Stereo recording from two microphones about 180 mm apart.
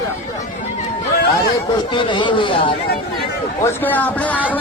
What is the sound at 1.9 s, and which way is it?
Speech, 25° left (ahead or behind).